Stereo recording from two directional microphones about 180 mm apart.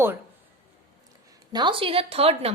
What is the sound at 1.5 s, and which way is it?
A woman's voice, 25° right (ahead or behind).